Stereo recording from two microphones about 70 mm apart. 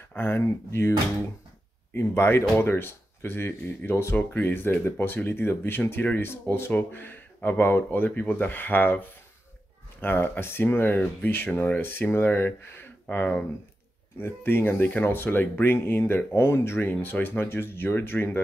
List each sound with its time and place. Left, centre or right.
0.1 s speech: left
2.0 s speech: left